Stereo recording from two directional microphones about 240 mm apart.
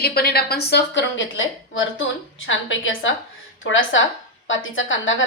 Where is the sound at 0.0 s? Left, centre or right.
Left.